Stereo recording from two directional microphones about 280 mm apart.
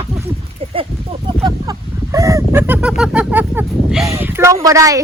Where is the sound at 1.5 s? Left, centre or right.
Centre.